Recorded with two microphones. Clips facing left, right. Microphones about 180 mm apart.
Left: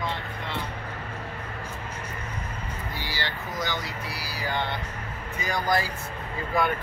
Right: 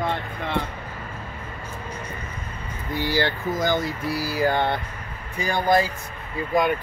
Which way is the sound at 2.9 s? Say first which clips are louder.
Right 13 dB; 55° right (ahead or behind).